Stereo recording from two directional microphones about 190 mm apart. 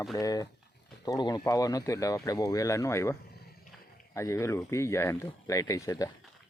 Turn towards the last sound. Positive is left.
turn(degrees=15)  # may be behind; listen again after turning